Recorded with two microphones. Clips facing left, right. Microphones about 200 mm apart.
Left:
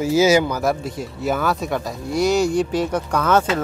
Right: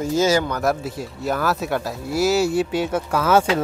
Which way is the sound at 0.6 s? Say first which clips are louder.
Even; centre (ahead or behind).